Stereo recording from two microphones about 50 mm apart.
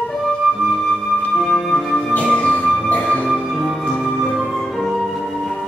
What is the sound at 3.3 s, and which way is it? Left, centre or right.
Music, centre.